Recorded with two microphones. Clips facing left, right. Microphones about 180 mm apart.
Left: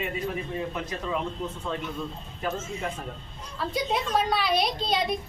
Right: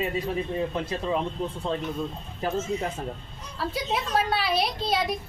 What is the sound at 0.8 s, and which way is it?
Speech, 30° right (ahead or behind).